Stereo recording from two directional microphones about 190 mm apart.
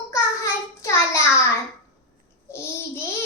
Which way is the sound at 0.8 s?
15° left (ahead or behind).